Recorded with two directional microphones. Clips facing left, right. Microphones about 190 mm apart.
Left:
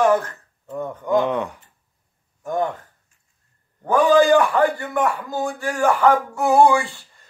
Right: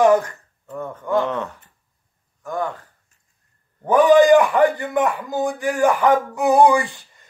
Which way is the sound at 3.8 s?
20° right (ahead or behind).